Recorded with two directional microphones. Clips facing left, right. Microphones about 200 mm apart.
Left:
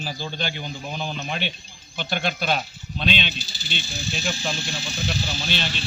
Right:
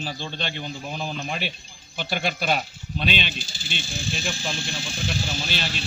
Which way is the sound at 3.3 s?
50° right (ahead or behind).